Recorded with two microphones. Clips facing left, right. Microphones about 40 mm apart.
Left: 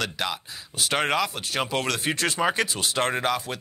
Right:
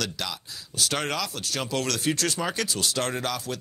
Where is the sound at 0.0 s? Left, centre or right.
Left.